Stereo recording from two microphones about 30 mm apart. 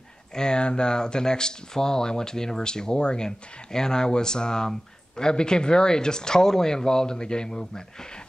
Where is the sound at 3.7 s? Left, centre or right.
Left.